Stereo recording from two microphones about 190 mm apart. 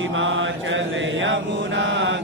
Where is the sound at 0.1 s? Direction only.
90° right.